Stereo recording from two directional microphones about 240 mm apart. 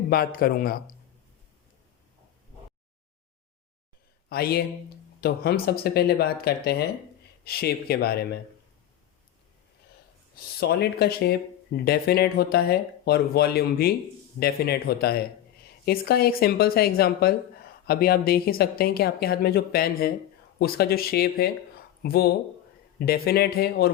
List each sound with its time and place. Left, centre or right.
0.1 s speech: left
4.3 s speech: left
10.6 s speech: left